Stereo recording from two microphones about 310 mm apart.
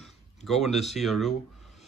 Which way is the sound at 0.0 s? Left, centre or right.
Centre.